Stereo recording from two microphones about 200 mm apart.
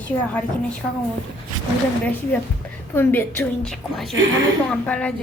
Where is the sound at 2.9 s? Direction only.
10° left (ahead or behind).